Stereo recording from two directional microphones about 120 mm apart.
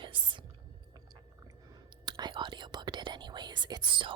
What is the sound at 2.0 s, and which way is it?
Whispering, 35° right (ahead or behind).